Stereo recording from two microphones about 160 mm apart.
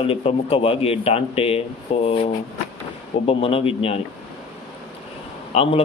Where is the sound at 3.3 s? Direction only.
35° left (ahead or behind).